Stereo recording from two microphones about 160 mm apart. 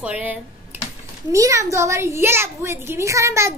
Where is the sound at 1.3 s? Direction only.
20° right (ahead or behind).